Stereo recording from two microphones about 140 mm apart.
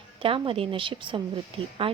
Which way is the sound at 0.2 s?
40° right (ahead or behind).